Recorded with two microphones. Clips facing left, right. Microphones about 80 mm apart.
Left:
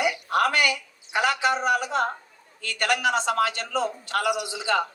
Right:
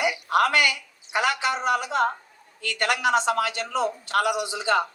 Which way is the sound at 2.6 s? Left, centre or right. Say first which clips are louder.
Even; right.